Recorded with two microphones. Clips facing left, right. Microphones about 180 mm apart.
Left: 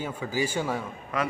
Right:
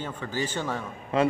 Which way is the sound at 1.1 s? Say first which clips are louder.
Right 6 dB; 30° right (ahead or behind).